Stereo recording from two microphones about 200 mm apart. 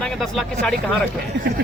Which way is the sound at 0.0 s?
5° left (ahead or behind).